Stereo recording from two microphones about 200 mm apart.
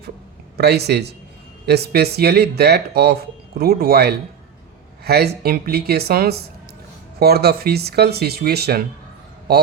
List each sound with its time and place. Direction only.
0.5 s a man's voice: 55° right (ahead or behind)